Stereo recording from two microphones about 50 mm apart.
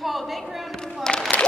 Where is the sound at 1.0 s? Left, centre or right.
Centre.